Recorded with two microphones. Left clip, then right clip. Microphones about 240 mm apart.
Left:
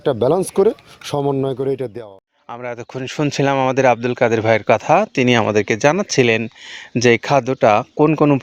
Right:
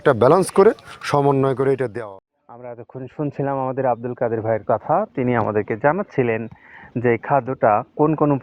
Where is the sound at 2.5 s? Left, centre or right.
Left.